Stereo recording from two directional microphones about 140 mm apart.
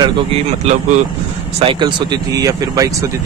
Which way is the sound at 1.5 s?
35° right (ahead or behind).